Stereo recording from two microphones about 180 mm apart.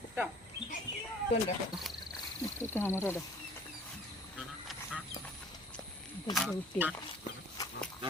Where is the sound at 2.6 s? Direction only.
10° left (ahead or behind).